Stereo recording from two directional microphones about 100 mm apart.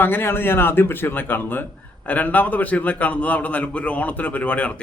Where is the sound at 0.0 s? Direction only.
20° left (ahead or behind).